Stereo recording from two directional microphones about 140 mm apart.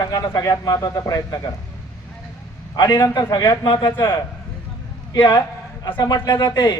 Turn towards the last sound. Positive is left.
turn(degrees=30)  # may be behind; listen again after turning